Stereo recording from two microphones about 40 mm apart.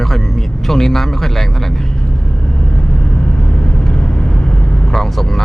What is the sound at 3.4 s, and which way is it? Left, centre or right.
Vehicle, left.